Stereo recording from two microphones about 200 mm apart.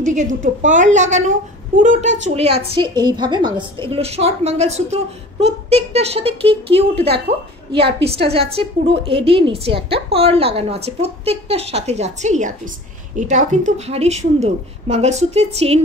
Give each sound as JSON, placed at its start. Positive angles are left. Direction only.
{"t": 0.0, "sound": "a woman's voice", "side_deg": -35}